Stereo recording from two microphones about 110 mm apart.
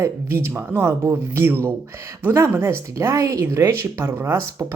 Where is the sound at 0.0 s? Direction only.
25° right (ahead or behind).